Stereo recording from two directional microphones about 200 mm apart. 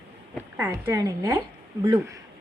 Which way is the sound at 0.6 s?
15° right (ahead or behind).